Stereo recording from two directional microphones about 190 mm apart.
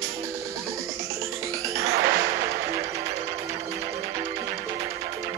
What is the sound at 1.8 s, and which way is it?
Music, 15° right (ahead or behind).